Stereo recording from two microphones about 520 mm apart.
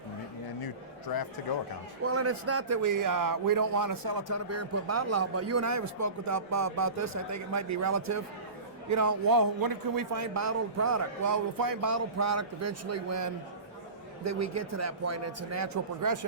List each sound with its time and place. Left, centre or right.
0.6 s a sound: left
2.0 s a man's voice: right
4.3 s a man's voice: right